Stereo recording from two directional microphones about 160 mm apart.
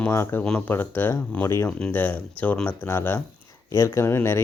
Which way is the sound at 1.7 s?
5° left (ahead or behind).